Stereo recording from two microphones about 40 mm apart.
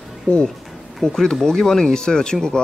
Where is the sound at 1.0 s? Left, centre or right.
Centre.